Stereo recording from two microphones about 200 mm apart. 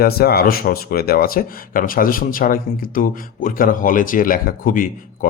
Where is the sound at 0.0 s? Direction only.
50° left (ahead or behind).